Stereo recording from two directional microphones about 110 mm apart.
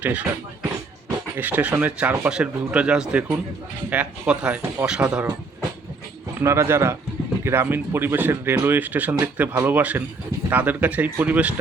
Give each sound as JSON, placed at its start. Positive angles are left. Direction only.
{"t": 0.0, "sound": "speech", "side_deg": -15}
{"t": 1.4, "sound": "speech", "side_deg": -15}
{"t": 6.4, "sound": "speech", "side_deg": -25}